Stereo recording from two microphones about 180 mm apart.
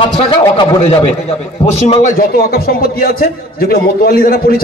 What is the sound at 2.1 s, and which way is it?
A man's voice, 55° left (ahead or behind).